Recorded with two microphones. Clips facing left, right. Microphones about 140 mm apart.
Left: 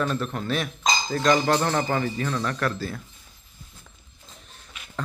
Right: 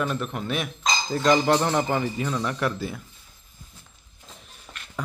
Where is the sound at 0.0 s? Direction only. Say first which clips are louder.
Left 1 dB; 10° right (ahead or behind).